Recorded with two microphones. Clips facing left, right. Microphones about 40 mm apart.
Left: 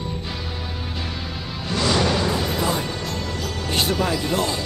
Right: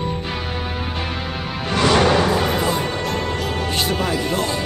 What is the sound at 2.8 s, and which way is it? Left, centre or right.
Music, right.